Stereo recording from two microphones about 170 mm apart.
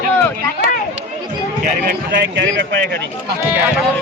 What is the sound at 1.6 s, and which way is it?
Speech, 60° right (ahead or behind).